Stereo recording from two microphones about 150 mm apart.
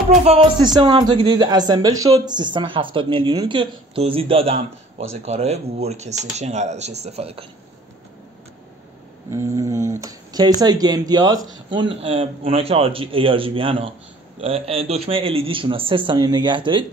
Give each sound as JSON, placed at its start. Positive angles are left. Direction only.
{"t": 0.7, "sound": "speech", "side_deg": -35}
{"t": 9.3, "sound": "a sound", "side_deg": -20}
{"t": 11.7, "sound": "speech", "side_deg": -35}